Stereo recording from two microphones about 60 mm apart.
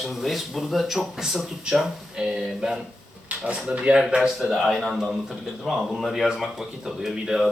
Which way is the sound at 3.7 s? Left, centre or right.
Centre.